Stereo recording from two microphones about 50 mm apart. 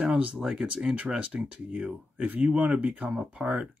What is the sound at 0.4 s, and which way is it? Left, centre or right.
Speech, centre.